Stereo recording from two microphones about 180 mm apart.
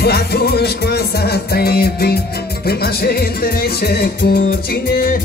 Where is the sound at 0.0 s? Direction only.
60° left (ahead or behind).